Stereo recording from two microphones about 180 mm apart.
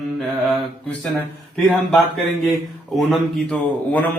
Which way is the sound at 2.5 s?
Centre (ahead or behind).